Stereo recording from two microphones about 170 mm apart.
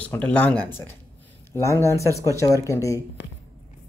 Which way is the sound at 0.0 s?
10° left (ahead or behind).